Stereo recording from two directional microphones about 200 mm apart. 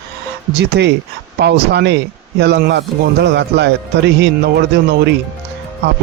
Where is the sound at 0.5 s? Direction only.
55° right (ahead or behind).